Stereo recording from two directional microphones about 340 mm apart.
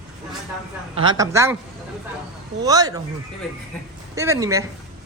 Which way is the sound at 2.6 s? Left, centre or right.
Centre.